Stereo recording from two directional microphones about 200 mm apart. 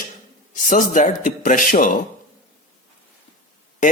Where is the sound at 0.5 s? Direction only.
40° left (ahead or behind).